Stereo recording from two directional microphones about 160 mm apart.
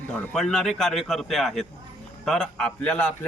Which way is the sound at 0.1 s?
5° left (ahead or behind).